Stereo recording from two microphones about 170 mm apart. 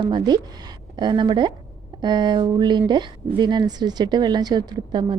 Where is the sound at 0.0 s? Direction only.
25° right (ahead or behind).